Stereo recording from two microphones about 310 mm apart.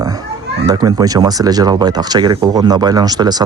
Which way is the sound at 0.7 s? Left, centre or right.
Centre.